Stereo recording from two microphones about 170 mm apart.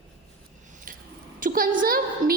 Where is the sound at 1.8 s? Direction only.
60° right (ahead or behind).